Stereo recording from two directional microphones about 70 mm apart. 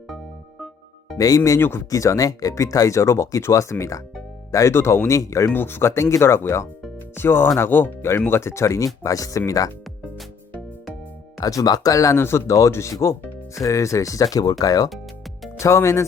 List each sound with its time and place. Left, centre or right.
1.1 s speech: left
1.5 s speech: left
1.9 s speech: left
5.5 s speech: left
11.3 s speech: left
14.8 s music: centre
15.5 s speech: left